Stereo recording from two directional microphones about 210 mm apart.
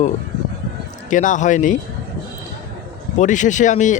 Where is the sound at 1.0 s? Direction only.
35° left (ahead or behind).